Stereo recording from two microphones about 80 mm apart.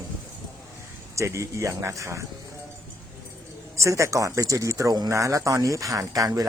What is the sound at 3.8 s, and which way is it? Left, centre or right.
Speech, right.